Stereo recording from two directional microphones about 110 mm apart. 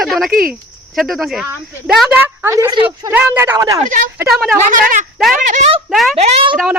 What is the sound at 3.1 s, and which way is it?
Speech, 15° right (ahead or behind).